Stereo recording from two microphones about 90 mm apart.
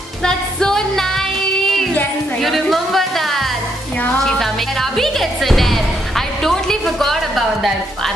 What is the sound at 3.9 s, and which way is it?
Music, 15° left (ahead or behind).